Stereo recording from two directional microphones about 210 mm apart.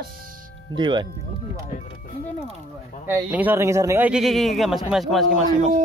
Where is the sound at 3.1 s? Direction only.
10° right (ahead or behind).